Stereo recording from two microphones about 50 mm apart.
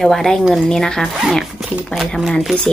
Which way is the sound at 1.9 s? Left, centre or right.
Left.